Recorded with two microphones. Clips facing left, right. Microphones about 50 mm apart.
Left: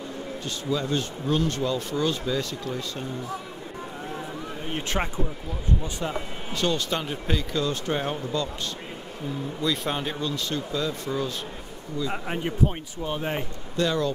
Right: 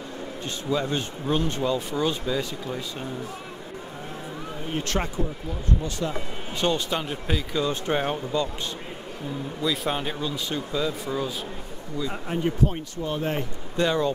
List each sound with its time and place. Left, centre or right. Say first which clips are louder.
0.7 s speech: right 1 dB; right
4.7 s speech: right 1 dB; centre
6.5 s speech: right 1 dB; centre
6.9 s speech: even; centre
7.6 s speech: right 2 dB; right
9.6 s speech: right 1 dB; centre
12.4 s speech: right 1 dB; centre
13.7 s speech: right 2 dB; right